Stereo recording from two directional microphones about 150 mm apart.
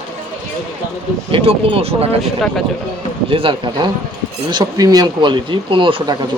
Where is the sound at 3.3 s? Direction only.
35° right (ahead or behind).